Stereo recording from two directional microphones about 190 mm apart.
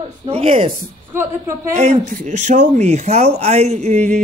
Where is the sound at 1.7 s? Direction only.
40° right (ahead or behind).